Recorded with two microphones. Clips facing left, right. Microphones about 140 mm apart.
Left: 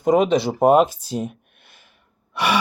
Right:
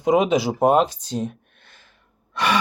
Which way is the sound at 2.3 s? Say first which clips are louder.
Left 1 dB; 10° left (ahead or behind).